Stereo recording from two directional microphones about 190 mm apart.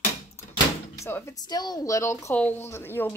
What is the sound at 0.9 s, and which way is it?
Speech, 15° left (ahead or behind).